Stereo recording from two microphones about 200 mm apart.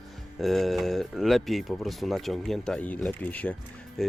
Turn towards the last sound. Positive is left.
turn(degrees=0)  # may be behind; listen again after turning